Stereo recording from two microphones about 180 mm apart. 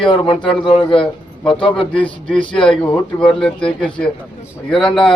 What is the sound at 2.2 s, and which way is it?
Speech, 5° left (ahead or behind).